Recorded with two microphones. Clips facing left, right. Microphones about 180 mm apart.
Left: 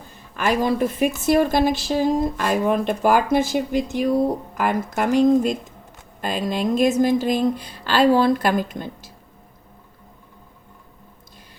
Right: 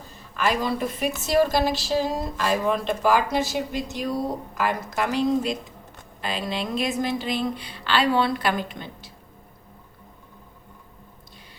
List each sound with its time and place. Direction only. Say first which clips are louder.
0.3 s a woman's voice: left 4 dB; 50° left (ahead or behind)